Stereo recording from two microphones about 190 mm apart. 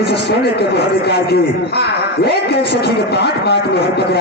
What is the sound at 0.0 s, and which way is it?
Speech, 60° left (ahead or behind).